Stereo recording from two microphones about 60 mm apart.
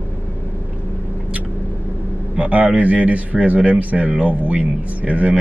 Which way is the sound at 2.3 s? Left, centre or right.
Right.